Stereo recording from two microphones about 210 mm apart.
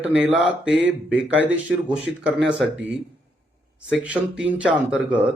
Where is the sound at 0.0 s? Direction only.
5° right (ahead or behind).